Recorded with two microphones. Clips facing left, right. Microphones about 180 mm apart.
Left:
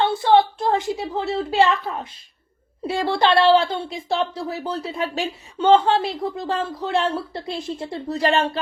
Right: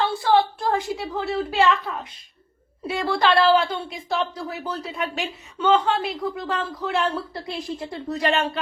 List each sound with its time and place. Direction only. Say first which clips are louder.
0.0 s a woman's voice: left 3 dB; 25° left (ahead or behind)